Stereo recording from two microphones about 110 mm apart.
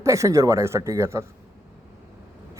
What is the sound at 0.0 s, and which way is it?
A man's voice, 30° right (ahead or behind).